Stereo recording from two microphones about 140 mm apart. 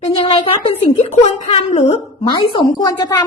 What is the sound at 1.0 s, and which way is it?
Speech, 50° left (ahead or behind).